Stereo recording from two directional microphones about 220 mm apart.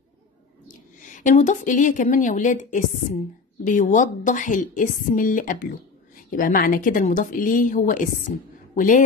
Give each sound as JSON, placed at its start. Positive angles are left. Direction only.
{"t": 0.7, "sound": "a woman's voice", "side_deg": 35}